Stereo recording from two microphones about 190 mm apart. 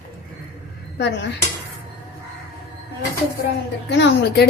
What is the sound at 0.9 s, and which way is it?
Speech, 65° left (ahead or behind).